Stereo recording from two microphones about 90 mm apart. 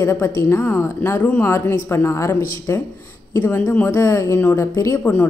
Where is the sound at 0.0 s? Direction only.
30° left (ahead or behind).